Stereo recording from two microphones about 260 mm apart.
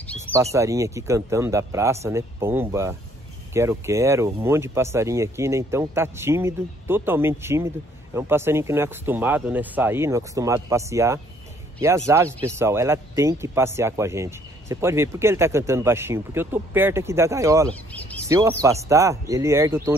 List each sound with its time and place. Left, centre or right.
0.2 s speech: centre
17.6 s speech: centre
18.6 s speech: centre